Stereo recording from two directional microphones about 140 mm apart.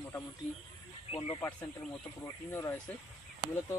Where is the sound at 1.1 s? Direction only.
45° left (ahead or behind).